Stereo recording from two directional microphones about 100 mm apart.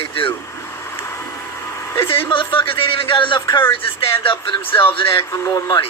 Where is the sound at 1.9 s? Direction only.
25° left (ahead or behind).